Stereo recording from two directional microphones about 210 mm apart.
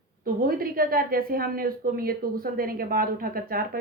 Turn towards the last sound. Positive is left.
turn(degrees=-45)  # may be behind; listen again after turning